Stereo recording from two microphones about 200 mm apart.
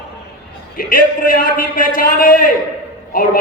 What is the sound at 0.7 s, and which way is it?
A man's voice, 45° left (ahead or behind).